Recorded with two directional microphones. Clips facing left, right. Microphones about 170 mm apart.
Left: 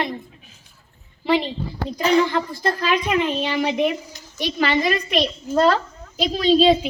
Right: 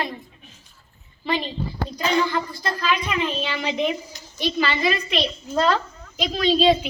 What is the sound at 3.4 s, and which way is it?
Speech, 15° left (ahead or behind).